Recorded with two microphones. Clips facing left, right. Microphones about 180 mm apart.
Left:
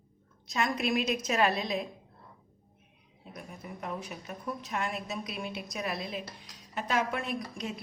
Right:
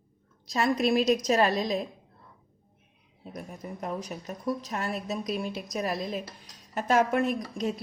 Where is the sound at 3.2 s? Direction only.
40° right (ahead or behind).